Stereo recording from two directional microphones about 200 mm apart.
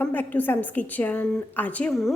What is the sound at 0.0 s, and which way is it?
A woman's voice, 10° left (ahead or behind).